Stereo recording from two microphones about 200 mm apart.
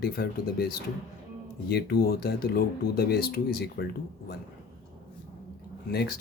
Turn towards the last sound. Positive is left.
turn(degrees=55)  # may be behind; listen again after turning